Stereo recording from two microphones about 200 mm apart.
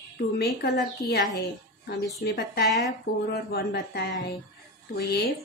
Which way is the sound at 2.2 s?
55° left (ahead or behind).